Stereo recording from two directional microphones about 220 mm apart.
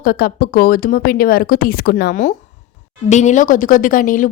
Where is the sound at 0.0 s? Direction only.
45° left (ahead or behind).